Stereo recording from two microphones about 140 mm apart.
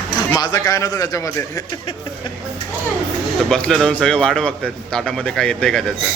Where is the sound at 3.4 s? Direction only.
5° left (ahead or behind).